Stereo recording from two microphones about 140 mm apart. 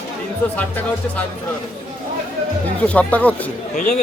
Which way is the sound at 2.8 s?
10° left (ahead or behind).